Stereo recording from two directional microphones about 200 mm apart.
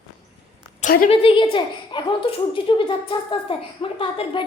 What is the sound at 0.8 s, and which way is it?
Speech, 45° left (ahead or behind).